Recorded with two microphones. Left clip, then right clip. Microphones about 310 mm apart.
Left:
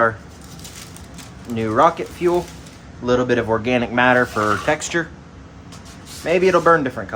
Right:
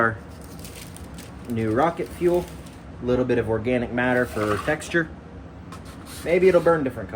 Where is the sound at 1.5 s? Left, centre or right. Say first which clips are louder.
Left 6 dB; centre.